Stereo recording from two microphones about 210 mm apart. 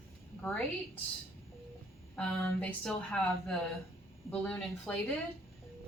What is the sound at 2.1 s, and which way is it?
A woman's voice, 5° left (ahead or behind).